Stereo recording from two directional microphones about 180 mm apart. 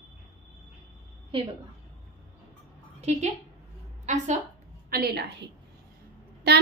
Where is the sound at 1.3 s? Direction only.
30° right (ahead or behind).